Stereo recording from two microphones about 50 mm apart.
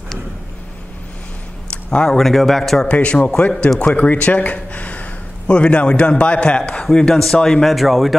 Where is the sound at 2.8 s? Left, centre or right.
Left; by 8.1 s centre.